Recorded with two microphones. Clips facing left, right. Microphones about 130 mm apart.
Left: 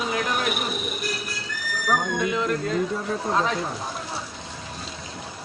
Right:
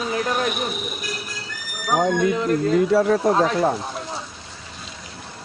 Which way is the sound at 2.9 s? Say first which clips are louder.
Right 8 dB; 85° right.